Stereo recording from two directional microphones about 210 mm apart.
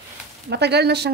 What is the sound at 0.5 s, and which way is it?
Speech, 50° right (ahead or behind).